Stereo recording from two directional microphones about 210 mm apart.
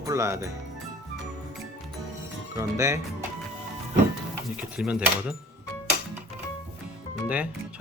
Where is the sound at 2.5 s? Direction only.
15° right (ahead or behind).